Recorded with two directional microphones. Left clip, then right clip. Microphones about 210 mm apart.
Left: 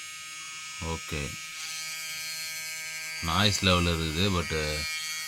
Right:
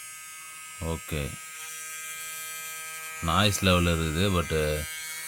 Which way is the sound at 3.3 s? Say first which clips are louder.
Right 1 dB; 40° right (ahead or behind).